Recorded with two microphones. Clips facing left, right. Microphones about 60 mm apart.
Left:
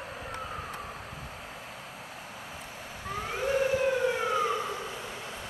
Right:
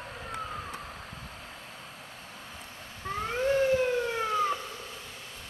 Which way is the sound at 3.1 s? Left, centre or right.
Centre.